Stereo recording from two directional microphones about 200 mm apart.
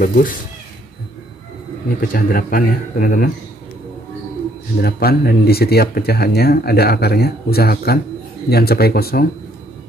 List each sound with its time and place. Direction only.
0.0 s speech: 45° left (ahead or behind)
2.0 s speech: 45° left (ahead or behind)
4.7 s speech: 50° left (ahead or behind)